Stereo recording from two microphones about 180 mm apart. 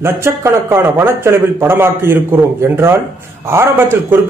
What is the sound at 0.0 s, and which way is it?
A man's voice, 15° right (ahead or behind).